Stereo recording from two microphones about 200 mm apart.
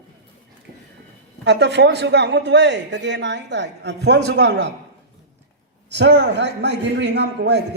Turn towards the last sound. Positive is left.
turn(degrees=-55)  # may be behind; listen again after turning